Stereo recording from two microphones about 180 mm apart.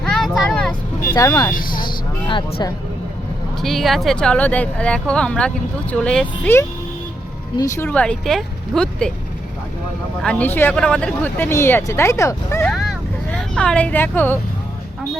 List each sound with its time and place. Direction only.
0.0 s vehicle: 5° left (ahead or behind)
0.7 s speech: 20° left (ahead or behind)
1.5 s speech: 50° left (ahead or behind)
3.6 s speech: centre (ahead or behind); by 7.9 s 20° left (ahead or behind)
7.9 s speech: 5° left (ahead or behind)
10.2 s speech: 10° left (ahead or behind)
12.7 s speech: centre (ahead or behind)